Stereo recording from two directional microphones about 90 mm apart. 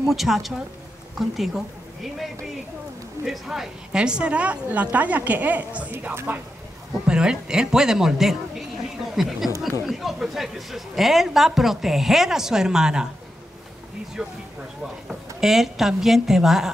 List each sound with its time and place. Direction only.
0.0 s a woman's voice: centre (ahead or behind); by 6.4 s 20° right (ahead or behind)
7.1 s a man's voice: 10° right (ahead or behind)
14.2 s a woman's voice: 5° right (ahead or behind)